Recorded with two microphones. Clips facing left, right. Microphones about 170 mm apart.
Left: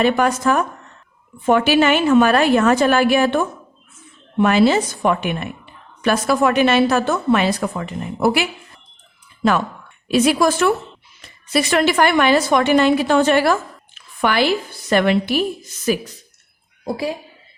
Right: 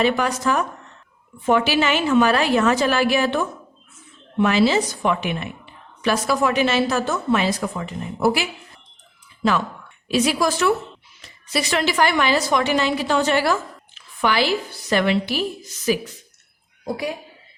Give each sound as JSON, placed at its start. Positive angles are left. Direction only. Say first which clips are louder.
{"t": 0.0, "sound": "a woman's voice", "louder": "left 4 dB", "side_deg": 50}